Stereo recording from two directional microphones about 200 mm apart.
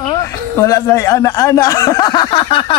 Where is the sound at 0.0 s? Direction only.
15° left (ahead or behind).